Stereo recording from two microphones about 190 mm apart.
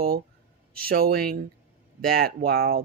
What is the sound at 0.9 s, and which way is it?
Speech, 50° right (ahead or behind).